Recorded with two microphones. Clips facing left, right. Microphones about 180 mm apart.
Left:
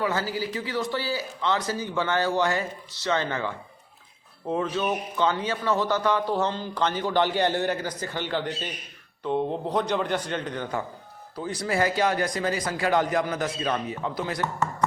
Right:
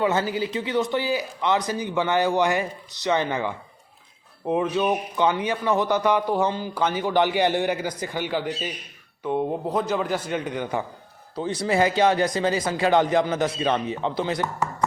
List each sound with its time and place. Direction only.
0.0 s a man's voice: 20° right (ahead or behind)
11.3 s a man's voice: 25° right (ahead or behind)